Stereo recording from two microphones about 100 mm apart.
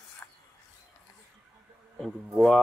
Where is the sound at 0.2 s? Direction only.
20° left (ahead or behind).